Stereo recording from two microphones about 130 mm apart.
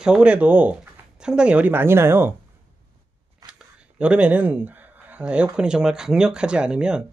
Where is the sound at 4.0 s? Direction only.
10° right (ahead or behind).